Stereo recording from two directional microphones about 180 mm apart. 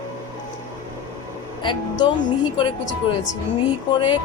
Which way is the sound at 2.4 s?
30° left (ahead or behind).